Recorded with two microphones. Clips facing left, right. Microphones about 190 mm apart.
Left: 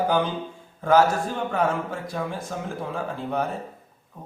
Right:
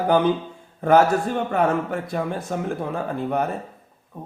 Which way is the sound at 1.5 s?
65° right (ahead or behind).